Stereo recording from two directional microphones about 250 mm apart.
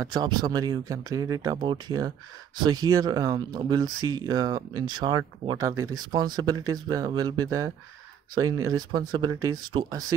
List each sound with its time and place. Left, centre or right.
0.0 s speech: centre